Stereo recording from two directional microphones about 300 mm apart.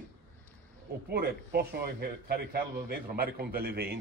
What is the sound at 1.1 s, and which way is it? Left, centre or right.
A man's voice, right.